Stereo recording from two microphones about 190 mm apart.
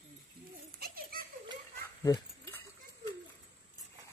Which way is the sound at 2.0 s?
15° left (ahead or behind).